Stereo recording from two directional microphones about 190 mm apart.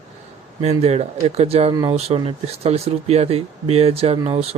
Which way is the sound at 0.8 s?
35° right (ahead or behind).